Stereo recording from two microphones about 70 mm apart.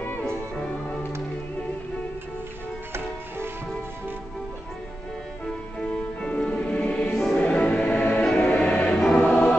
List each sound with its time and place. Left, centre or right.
2.9 s music: right
5.9 s music: centre
9.2 s choir: centre